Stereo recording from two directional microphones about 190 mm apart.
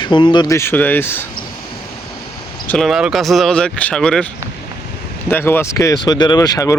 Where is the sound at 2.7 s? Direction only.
Centre (ahead or behind).